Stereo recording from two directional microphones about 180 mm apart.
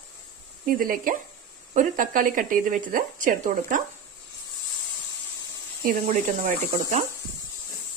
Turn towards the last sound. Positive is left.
turn(degrees=-40)  # may be behind; listen again after turning